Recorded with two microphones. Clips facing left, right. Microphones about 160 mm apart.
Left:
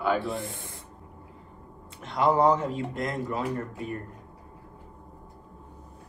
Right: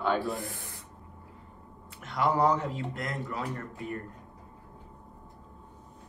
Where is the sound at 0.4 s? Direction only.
20° left (ahead or behind).